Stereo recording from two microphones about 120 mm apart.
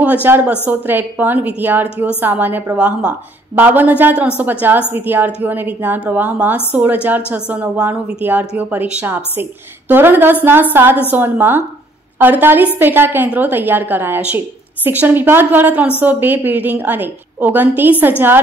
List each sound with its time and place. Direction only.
0.0 s a woman's voice: 15° right (ahead or behind)